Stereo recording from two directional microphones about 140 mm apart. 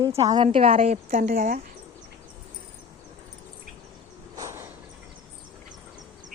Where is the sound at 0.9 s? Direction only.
65° right (ahead or behind).